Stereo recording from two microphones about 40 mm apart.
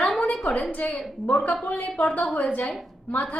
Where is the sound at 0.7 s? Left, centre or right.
Left.